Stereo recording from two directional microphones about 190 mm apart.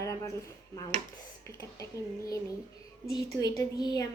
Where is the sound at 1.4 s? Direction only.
15° left (ahead or behind).